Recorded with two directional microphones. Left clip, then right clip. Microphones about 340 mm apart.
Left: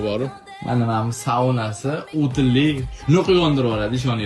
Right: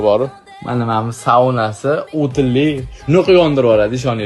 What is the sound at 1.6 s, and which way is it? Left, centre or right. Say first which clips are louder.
Speech: right 9 dB; right.